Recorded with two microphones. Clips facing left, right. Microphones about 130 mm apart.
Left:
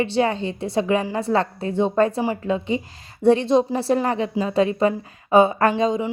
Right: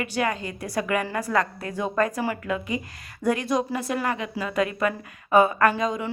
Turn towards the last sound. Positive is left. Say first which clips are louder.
# left 3 dB
turn(degrees=30)  # may be behind; listen again after turning